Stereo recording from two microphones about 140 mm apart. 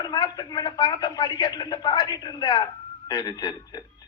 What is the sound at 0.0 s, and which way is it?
Speech, 30° left (ahead or behind).